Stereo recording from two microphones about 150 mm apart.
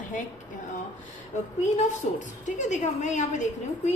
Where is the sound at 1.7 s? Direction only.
55° left (ahead or behind).